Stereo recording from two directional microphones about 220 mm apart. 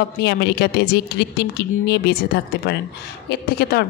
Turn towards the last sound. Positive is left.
turn(degrees=45)  # may be behind; listen again after turning